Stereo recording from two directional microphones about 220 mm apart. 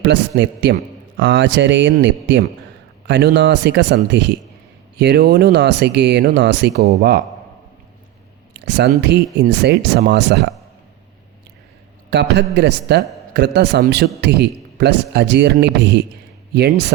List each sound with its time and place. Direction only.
0.0 s a man's voice: 55° right (ahead or behind)
8.6 s a man's voice: 50° right (ahead or behind)
12.1 s a man's voice: 50° right (ahead or behind)